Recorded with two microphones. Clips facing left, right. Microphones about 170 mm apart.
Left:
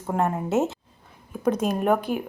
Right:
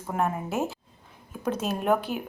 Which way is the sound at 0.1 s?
20° left (ahead or behind).